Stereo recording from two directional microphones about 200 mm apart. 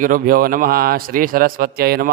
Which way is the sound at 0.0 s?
45° right (ahead or behind).